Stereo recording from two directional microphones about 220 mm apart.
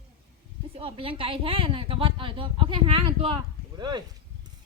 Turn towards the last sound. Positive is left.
turn(degrees=-20)  # may be behind; listen again after turning